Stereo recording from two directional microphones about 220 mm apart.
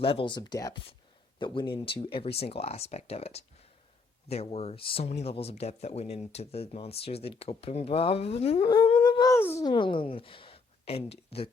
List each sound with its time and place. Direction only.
0.0 s speech: 25° left (ahead or behind)